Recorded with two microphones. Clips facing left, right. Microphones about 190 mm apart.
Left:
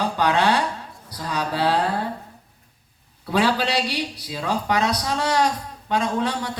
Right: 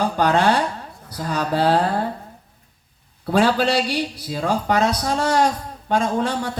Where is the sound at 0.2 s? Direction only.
45° right (ahead or behind).